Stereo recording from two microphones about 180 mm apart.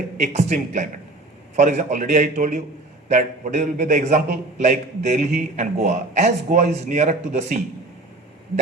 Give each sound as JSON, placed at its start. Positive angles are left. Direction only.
{"t": 0.2, "sound": "a man's voice", "side_deg": -40}